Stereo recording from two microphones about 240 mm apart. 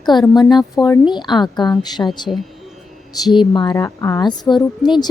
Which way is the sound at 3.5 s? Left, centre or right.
Centre.